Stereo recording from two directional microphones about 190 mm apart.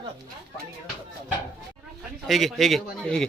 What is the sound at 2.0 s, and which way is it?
A man's voice, centre (ahead or behind).